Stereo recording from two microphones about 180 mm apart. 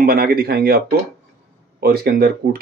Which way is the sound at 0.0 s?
55° right (ahead or behind).